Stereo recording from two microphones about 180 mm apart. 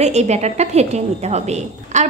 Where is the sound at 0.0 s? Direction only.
40° right (ahead or behind).